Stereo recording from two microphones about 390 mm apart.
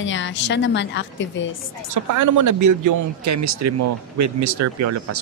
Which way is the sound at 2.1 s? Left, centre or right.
Right.